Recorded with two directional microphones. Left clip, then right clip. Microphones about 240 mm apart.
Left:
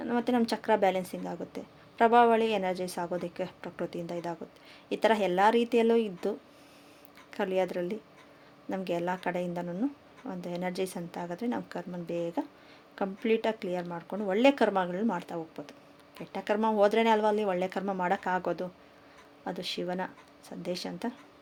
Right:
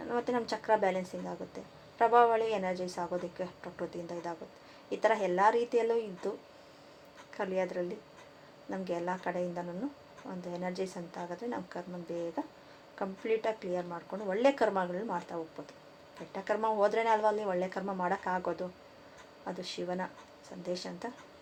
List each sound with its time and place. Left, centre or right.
0.0 s speech: left
7.3 s speech: left